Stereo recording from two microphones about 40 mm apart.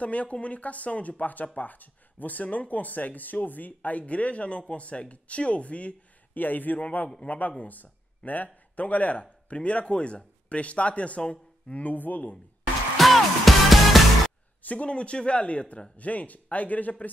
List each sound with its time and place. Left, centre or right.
0.0 s speech: left
6.3 s speech: left
11.8 s speech: left
12.9 s music: centre
14.6 s speech: left